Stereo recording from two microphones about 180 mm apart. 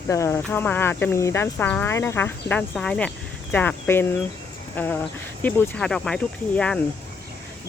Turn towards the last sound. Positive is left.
turn(degrees=5)  # may be behind; listen again after turning